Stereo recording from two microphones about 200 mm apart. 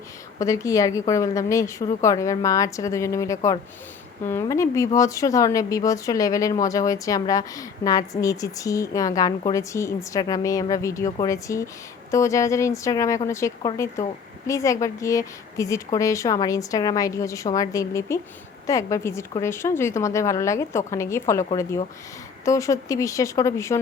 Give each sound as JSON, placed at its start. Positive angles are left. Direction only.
{"t": 0.3, "sound": "speech", "side_deg": 15}